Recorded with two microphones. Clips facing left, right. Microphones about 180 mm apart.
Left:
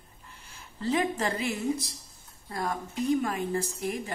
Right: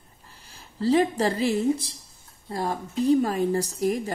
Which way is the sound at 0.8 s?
35° right (ahead or behind).